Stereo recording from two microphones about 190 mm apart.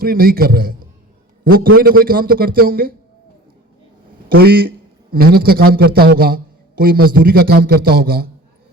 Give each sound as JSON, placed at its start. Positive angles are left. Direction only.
{"t": 0.0, "sound": "a man's voice", "side_deg": -50}
{"t": 4.3, "sound": "a man's voice", "side_deg": -55}